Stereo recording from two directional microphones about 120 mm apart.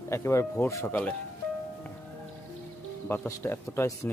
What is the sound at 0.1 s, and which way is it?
Speech, 25° left (ahead or behind).